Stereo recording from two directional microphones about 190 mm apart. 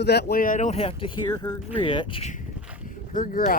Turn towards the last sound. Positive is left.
turn(degrees=50)  # may be behind; listen again after turning